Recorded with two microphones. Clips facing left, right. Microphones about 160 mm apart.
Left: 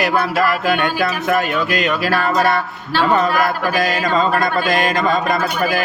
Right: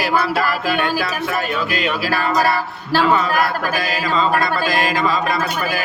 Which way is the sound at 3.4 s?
45° left (ahead or behind).